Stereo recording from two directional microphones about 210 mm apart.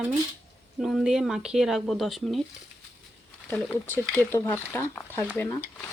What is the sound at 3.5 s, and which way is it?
Speech, 10° left (ahead or behind).